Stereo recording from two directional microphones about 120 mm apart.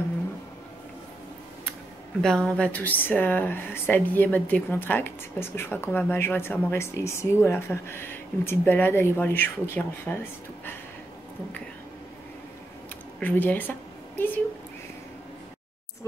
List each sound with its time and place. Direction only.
2.2 s speech: 5° left (ahead or behind)
13.2 s a woman's voice: 15° left (ahead or behind)